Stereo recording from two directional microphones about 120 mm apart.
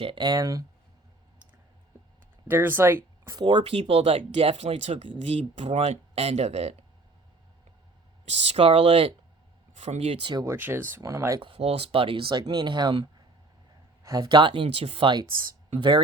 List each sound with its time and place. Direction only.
0.0 s speech: 40° right (ahead or behind)
2.5 s speech: 15° right (ahead or behind)
3.3 s speech: 40° right (ahead or behind)
3.6 s speech: 50° right (ahead or behind)
8.2 s speech: 65° right (ahead or behind)
9.7 s speech: 70° right (ahead or behind); by 10.3 s 50° right (ahead or behind)
10.4 s speech: 20° right (ahead or behind)
11.3 s speech: 50° right (ahead or behind)